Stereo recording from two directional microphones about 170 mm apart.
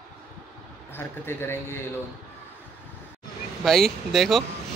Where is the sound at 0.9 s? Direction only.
15° left (ahead or behind).